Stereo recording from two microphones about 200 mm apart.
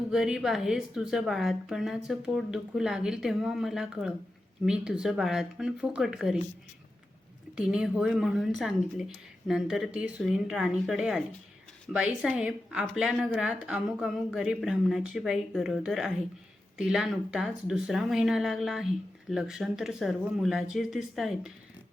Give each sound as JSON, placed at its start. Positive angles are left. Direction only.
{"t": 0.1, "sound": "a woman's voice", "side_deg": -5}
{"t": 7.5, "sound": "a woman's voice", "side_deg": -5}